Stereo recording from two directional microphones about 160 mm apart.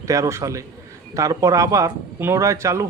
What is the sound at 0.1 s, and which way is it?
A man's voice, 20° right (ahead or behind).